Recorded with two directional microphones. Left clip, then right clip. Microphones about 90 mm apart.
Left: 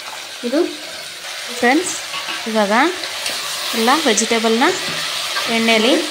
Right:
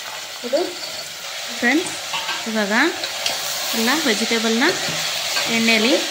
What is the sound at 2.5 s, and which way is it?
Hair dryer, 15° left (ahead or behind).